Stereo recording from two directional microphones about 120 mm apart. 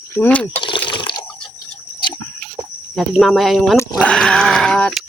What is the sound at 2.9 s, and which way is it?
Dog, centre (ahead or behind).